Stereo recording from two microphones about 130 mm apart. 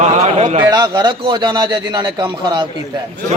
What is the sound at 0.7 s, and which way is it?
A man's voice, 30° right (ahead or behind).